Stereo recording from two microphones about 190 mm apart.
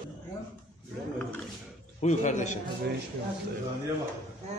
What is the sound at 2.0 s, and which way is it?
Speech, 40° left (ahead or behind).